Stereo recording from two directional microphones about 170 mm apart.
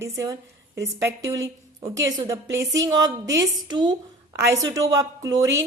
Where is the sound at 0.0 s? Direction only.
15° right (ahead or behind).